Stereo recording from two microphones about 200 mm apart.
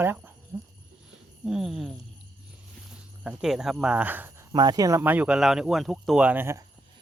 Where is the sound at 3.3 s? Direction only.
Centre (ahead or behind).